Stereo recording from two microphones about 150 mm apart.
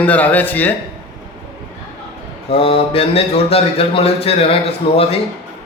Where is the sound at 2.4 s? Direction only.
40° left (ahead or behind).